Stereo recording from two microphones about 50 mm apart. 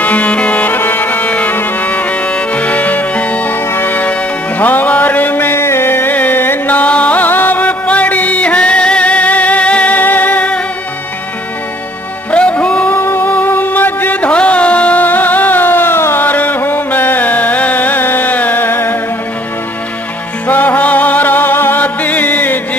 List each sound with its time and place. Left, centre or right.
0.0 s music: left
0.7 s music: left
5.5 s music: left
6.8 s music: left
7.2 s music: left
12.3 s music: left
12.9 s music: left
14.3 s music: left
16.3 s music: left
20.4 s music: left
21.8 s music: left